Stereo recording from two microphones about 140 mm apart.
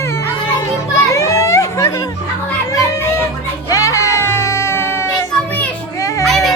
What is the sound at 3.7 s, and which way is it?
Music, 25° left (ahead or behind).